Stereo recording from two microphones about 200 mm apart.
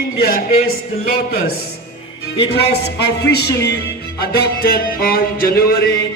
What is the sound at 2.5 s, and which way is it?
A man's voice, 55° left (ahead or behind).